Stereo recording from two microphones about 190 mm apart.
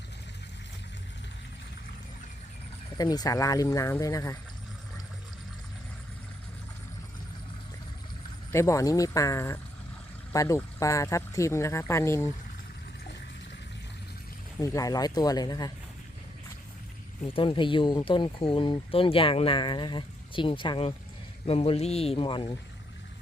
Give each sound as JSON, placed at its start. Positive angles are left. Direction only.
{"t": 3.0, "sound": "speech", "side_deg": 20}
{"t": 8.5, "sound": "speech", "side_deg": 15}
{"t": 14.6, "sound": "speech", "side_deg": 20}
{"t": 17.2, "sound": "speech", "side_deg": 25}